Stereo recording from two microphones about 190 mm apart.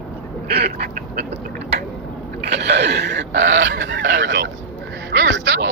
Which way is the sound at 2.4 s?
60° right (ahead or behind).